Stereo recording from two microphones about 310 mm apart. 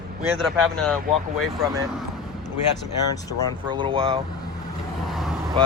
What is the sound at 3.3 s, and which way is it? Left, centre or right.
Speech, left.